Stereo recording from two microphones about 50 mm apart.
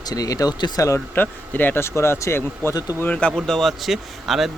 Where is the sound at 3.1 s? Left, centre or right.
Left.